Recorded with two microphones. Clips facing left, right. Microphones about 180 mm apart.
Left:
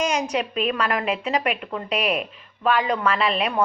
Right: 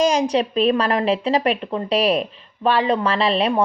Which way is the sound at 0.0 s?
30° right (ahead or behind).